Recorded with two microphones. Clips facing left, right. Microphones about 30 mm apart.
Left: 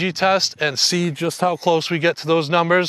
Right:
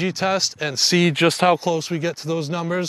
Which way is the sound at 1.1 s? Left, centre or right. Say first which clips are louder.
Right 4 dB; right.